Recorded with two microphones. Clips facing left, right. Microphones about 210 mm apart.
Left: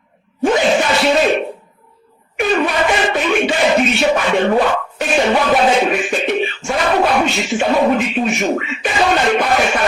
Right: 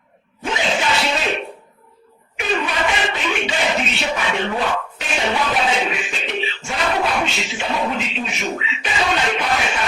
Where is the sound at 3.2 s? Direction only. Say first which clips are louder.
Left 7 dB; 50° left (ahead or behind).